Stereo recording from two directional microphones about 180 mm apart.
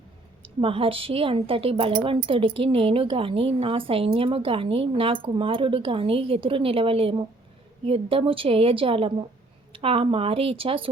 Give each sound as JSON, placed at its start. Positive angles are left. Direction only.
{"t": 0.4, "sound": "a woman's voice", "side_deg": -30}